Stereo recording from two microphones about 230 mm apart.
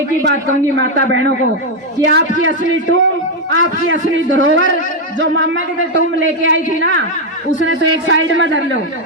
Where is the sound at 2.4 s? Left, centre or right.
Right.